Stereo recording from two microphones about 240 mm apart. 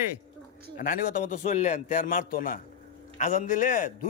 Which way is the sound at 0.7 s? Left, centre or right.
Left.